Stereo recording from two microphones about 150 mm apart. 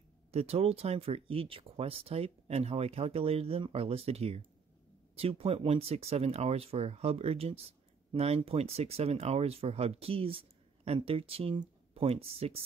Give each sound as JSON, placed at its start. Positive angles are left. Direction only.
{"t": 0.3, "sound": "speech", "side_deg": -45}